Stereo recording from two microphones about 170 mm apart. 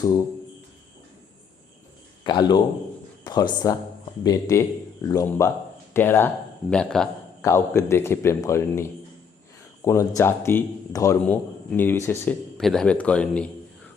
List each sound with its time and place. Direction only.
2.2 s a man's voice: 25° left (ahead or behind); by 7.1 s 5° left (ahead or behind)
7.4 s a man's voice: 15° left (ahead or behind)
12.5 s a man's voice: 5° left (ahead or behind)